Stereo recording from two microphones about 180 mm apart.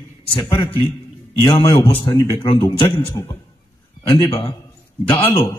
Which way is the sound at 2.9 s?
15° left (ahead or behind).